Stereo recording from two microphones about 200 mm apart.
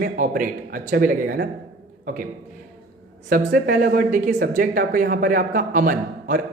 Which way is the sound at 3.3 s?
45° right (ahead or behind).